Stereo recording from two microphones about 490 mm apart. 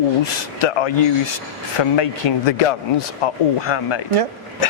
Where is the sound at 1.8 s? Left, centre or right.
Left.